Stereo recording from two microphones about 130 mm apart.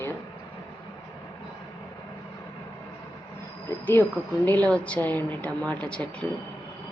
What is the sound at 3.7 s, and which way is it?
Speech, 15° left (ahead or behind).